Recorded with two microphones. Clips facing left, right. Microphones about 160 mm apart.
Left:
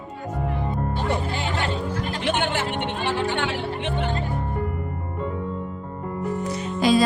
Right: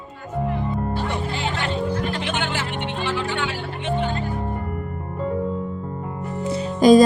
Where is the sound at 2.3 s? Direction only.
55° left (ahead or behind).